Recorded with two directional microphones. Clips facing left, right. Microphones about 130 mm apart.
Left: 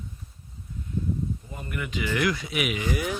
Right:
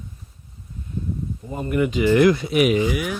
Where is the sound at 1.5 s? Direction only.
35° right (ahead or behind).